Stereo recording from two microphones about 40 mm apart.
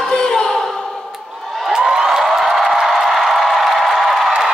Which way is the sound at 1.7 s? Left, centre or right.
Centre.